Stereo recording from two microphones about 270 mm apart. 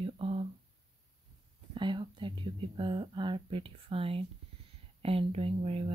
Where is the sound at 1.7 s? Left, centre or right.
Centre.